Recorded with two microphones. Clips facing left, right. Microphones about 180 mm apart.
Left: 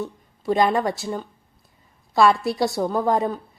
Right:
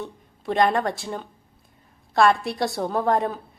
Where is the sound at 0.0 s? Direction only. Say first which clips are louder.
Left 4 dB; centre (ahead or behind).